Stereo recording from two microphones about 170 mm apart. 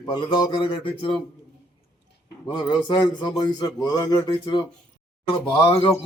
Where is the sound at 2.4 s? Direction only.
25° left (ahead or behind).